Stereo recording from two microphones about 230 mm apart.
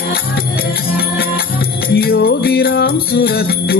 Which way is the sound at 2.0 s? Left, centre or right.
Left.